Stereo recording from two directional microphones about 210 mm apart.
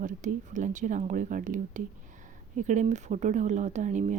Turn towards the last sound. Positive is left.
turn(degrees=-35)  # may be behind; listen again after turning